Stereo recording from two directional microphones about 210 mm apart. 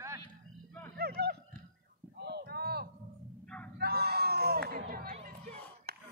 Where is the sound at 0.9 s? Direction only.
50° right (ahead or behind).